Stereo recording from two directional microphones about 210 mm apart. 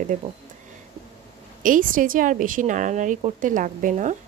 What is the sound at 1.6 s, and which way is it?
Speech, 40° right (ahead or behind).